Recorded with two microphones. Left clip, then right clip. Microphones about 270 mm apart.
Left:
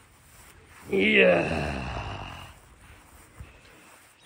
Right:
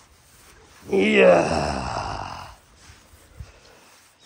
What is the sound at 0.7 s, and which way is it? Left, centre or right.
Snoring, centre.